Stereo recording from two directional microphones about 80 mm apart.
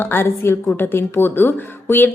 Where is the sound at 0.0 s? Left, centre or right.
Left.